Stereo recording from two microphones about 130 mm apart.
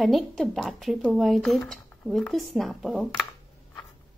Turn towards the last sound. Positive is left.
turn(degrees=0)  # may be behind; listen again after turning